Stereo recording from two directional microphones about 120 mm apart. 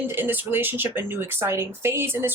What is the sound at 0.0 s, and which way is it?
Speech, 15° right (ahead or behind).